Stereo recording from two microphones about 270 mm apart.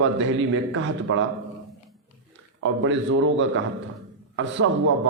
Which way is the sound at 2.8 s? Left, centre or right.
Right.